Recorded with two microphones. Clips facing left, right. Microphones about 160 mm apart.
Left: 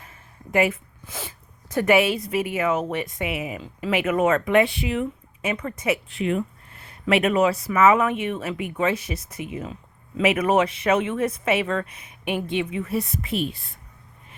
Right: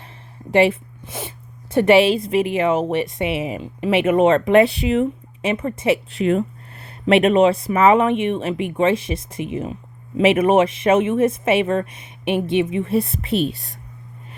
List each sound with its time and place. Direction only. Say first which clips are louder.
0.5 s a woman's voice: right 6 dB; 30° right (ahead or behind)